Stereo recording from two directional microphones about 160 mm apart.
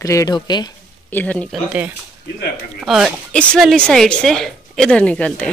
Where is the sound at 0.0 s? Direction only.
20° left (ahead or behind).